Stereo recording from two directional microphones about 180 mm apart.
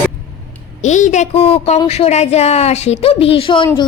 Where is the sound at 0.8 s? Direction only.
40° left (ahead or behind).